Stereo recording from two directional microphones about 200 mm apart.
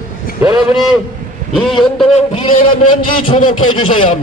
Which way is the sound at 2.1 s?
30° left (ahead or behind).